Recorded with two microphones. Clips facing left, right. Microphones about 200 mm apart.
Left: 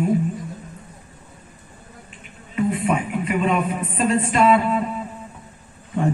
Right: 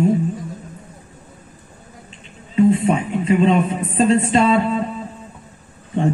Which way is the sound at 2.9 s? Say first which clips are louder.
Right 4 dB; 25° right (ahead or behind).